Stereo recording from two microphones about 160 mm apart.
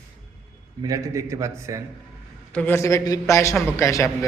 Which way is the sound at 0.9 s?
20° right (ahead or behind).